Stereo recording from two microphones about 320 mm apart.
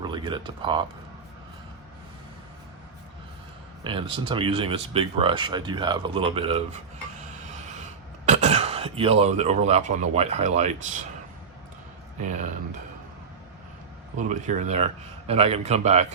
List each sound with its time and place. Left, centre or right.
0.0 s speech: centre
3.8 s speech: centre
8.3 s speech: right
14.2 s a man's voice: right